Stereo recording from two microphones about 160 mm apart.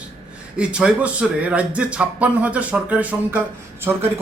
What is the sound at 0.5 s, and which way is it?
Speech, 5° right (ahead or behind).